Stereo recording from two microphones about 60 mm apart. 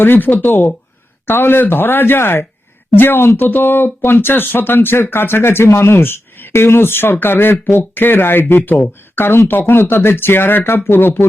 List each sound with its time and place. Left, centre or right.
0.0 s speech: left